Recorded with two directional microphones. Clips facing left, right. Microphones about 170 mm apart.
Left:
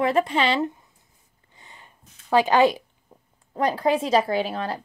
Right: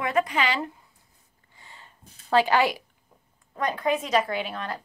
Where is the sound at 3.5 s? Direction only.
30° left (ahead or behind).